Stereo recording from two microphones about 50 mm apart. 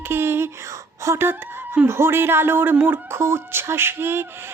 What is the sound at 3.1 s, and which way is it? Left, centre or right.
Music, right.